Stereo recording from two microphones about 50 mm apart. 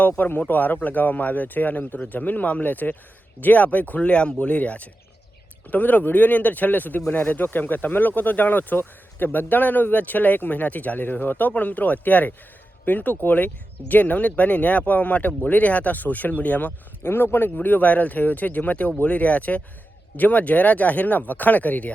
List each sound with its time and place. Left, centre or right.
0.2 s speech: left
17.0 s speech: left